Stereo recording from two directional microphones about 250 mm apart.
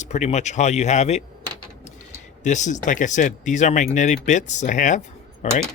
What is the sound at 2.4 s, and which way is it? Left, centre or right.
Speech, left.